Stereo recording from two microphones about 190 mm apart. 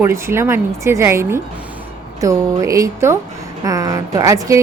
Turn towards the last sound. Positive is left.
turn(degrees=-15)  # may be behind; listen again after turning